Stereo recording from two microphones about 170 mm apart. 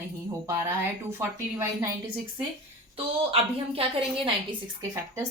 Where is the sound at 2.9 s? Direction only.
35° right (ahead or behind).